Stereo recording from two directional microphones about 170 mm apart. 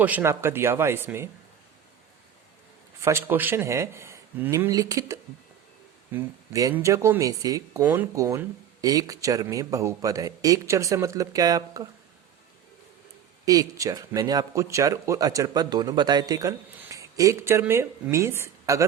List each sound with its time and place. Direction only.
0.0 s speech: 10° right (ahead or behind)
3.0 s speech: 15° right (ahead or behind)
13.4 s speech: 20° right (ahead or behind)